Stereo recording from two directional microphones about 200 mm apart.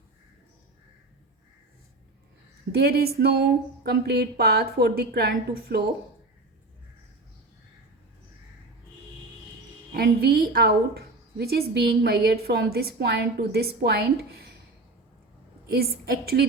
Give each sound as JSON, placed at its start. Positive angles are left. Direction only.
{"t": 2.7, "sound": "a woman's voice", "side_deg": -50}
{"t": 9.9, "sound": "a woman's voice", "side_deg": -55}
{"t": 15.6, "sound": "a woman's voice", "side_deg": -50}